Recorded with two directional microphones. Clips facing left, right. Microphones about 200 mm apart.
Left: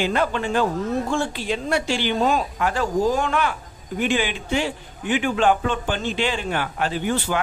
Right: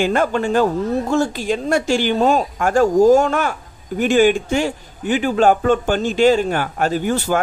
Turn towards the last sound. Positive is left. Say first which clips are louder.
# right 5 dB
turn(degrees=-45)  # may be behind; listen again after turning